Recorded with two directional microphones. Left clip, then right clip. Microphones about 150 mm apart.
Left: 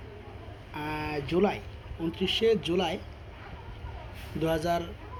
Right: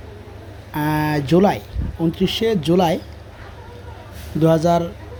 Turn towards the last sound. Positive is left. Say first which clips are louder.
# right 12 dB
turn(degrees=-45)  # may be behind; listen again after turning